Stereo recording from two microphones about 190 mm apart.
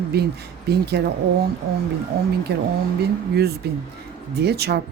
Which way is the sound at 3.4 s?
55° right (ahead or behind).